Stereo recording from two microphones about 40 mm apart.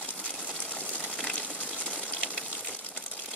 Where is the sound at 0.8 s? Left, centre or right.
Left.